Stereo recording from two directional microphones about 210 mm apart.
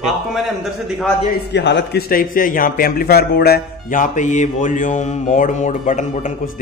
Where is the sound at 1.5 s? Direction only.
55° left (ahead or behind).